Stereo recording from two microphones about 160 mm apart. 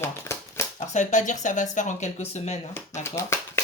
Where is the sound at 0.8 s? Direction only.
50° left (ahead or behind).